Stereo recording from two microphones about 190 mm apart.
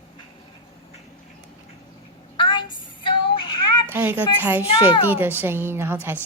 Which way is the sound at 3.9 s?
10° right (ahead or behind).